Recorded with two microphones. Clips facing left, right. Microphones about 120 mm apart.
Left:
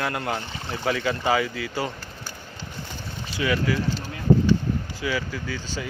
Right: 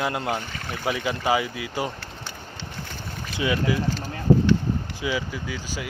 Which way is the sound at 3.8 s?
45° right (ahead or behind).